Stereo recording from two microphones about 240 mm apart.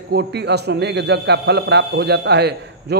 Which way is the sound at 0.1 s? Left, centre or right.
Right.